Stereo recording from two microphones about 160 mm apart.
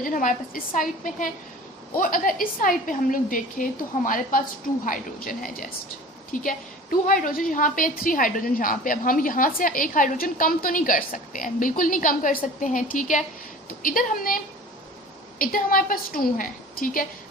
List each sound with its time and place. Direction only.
0.0 s a woman's voice: 55° left (ahead or behind)